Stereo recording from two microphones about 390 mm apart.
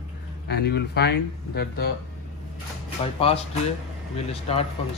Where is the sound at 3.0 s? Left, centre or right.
Centre.